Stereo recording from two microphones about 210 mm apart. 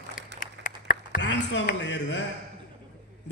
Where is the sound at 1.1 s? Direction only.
60° left (ahead or behind).